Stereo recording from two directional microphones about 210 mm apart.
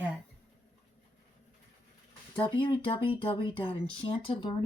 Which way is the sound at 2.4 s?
25° left (ahead or behind).